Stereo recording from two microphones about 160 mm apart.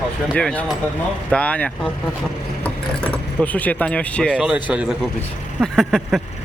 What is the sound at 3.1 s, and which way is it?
Speech, 10° left (ahead or behind).